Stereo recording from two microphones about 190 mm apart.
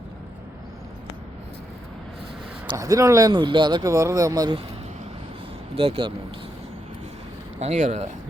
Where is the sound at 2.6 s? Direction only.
20° right (ahead or behind).